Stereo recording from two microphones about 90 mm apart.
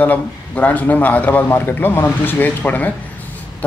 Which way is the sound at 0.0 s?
15° left (ahead or behind).